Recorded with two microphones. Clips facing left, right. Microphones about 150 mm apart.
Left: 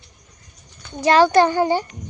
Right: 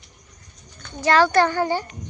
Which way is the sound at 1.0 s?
15° left (ahead or behind).